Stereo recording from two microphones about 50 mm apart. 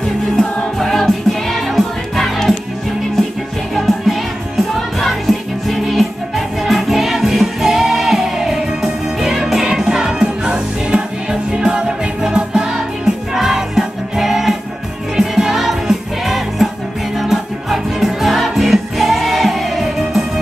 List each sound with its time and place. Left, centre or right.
0.4 s music: centre
3.7 s music: centre